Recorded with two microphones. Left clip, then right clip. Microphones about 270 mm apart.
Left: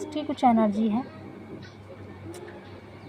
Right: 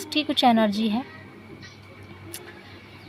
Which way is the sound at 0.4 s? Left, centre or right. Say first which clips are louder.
Even; right.